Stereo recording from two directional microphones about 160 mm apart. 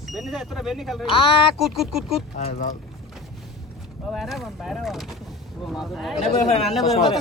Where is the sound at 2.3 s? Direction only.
45° left (ahead or behind).